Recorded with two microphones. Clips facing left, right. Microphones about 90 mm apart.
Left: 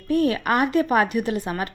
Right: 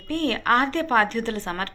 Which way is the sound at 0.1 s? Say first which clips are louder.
Left 2 dB; 10° left (ahead or behind).